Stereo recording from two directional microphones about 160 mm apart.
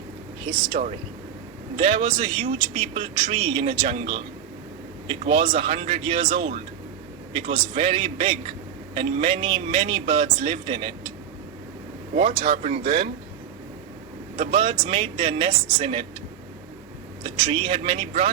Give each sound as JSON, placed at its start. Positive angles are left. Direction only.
{"t": 0.5, "sound": "speech", "side_deg": -35}
{"t": 1.7, "sound": "speech", "side_deg": -35}
{"t": 5.3, "sound": "speech", "side_deg": -35}
{"t": 12.4, "sound": "speech", "side_deg": -40}
{"t": 14.3, "sound": "speech", "side_deg": -35}
{"t": 17.2, "sound": "speech", "side_deg": -35}